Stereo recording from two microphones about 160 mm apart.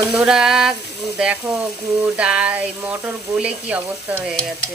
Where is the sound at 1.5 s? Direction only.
5° right (ahead or behind).